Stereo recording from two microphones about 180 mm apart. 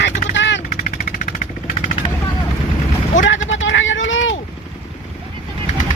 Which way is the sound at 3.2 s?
90° left.